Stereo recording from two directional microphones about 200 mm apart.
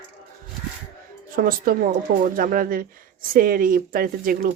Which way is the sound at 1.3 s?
45° right (ahead or behind).